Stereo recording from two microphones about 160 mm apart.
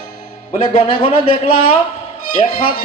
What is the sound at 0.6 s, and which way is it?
Speech, 35° left (ahead or behind).